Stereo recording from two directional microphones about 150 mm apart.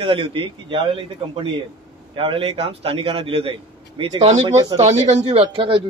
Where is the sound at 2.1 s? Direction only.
40° right (ahead or behind).